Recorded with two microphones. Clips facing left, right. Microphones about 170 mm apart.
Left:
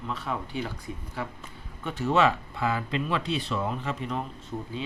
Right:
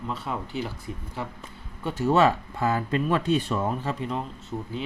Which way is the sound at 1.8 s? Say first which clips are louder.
Right 3 dB; 40° right (ahead or behind).